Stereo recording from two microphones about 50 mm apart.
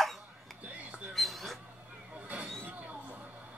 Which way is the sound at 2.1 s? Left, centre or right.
Right.